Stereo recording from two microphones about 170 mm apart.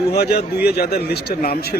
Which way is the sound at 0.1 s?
70° left (ahead or behind).